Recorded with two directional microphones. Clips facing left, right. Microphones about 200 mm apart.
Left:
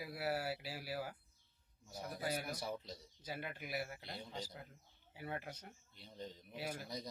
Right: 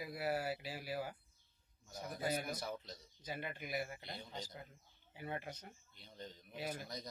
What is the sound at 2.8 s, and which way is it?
Speech, 30° left (ahead or behind).